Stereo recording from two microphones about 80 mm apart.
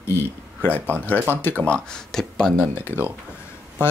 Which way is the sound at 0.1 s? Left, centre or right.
Left.